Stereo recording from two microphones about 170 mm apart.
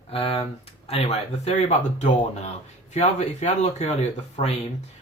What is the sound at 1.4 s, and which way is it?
Speech, 40° left (ahead or behind).